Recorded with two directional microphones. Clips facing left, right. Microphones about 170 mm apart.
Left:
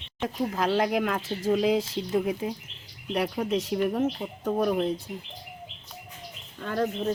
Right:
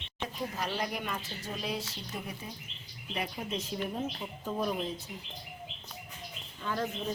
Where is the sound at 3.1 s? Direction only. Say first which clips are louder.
Left 10 dB; 65° left (ahead or behind).